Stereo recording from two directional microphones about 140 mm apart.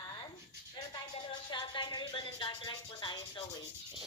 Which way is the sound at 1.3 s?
35° left (ahead or behind).